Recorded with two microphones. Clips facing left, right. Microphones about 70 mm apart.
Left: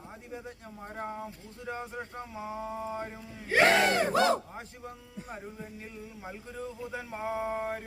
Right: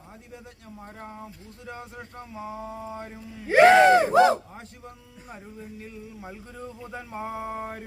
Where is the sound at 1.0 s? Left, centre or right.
Centre.